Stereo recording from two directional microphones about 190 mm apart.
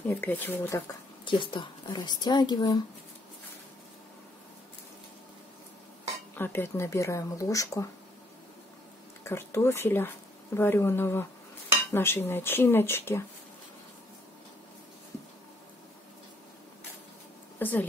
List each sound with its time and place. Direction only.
0.0 s speech: 10° left (ahead or behind)
1.2 s speech: 25° left (ahead or behind)
6.3 s speech: 10° left (ahead or behind)
9.2 s speech: 15° left (ahead or behind)
17.6 s speech: 10° left (ahead or behind)